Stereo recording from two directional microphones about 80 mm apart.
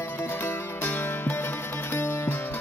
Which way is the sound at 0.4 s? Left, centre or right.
Left.